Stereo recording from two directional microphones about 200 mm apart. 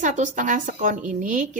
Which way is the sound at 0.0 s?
40° right (ahead or behind).